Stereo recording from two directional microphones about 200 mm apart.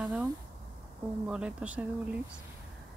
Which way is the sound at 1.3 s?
5° right (ahead or behind).